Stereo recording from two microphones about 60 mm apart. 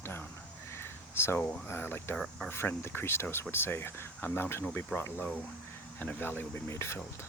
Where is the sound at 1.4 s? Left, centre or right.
Left.